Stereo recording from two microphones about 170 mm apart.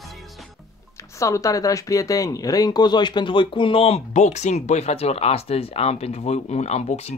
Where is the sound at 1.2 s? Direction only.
20° left (ahead or behind).